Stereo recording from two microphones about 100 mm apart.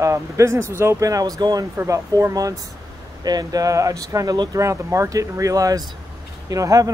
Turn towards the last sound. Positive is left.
turn(degrees=-35)  # may be behind; listen again after turning